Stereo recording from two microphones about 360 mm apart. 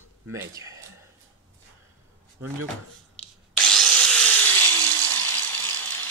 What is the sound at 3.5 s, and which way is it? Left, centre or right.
Wood, centre.